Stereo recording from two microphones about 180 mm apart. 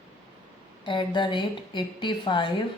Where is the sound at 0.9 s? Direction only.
25° left (ahead or behind).